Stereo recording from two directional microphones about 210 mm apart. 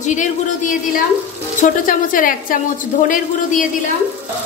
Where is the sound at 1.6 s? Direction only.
40° left (ahead or behind).